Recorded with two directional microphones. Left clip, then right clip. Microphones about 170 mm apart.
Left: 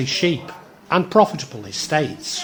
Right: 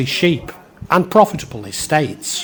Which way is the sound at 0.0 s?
35° right (ahead or behind).